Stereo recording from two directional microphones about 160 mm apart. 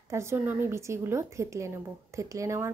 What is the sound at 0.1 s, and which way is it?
A woman's voice, 15° right (ahead or behind).